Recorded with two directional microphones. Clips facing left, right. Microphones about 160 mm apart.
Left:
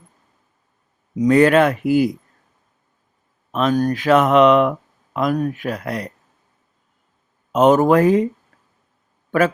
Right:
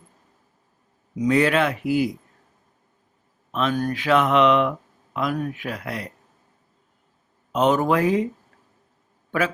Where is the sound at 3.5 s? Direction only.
40° left (ahead or behind).